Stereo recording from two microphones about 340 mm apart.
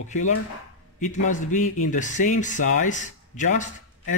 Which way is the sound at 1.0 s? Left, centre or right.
Left.